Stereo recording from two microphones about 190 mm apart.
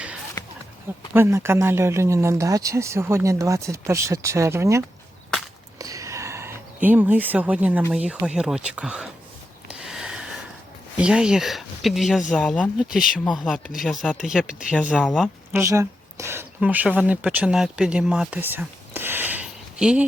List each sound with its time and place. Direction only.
0.4 s a sound: 15° left (ahead or behind)
1.1 s speech: 15° right (ahead or behind)
5.8 s speech: 15° right (ahead or behind)
9.6 s a sound: 5° right (ahead or behind)
10.9 s speech: 5° right (ahead or behind)
15.5 s speech: 15° right (ahead or behind)